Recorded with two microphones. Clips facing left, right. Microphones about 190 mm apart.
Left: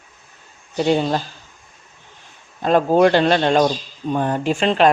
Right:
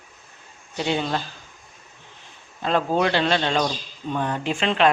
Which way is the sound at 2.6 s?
45° left (ahead or behind).